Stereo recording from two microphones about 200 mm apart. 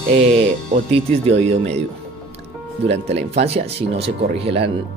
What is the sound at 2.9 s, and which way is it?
Speech, 30° right (ahead or behind).